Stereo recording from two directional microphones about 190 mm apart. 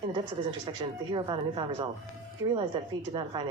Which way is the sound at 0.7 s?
25° right (ahead or behind).